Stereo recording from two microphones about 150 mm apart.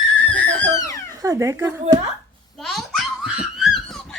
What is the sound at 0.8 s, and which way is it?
Cat, 20° left (ahead or behind).